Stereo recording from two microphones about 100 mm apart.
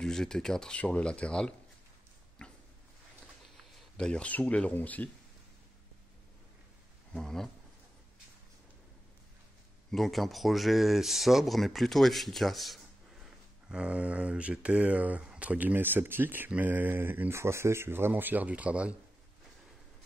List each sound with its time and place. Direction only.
0.0 s speech: 5° left (ahead or behind)
2.4 s a sound: 10° left (ahead or behind)
3.9 s speech: 10° left (ahead or behind)
7.1 s speech: 5° left (ahead or behind)
9.8 s speech: centre (ahead or behind)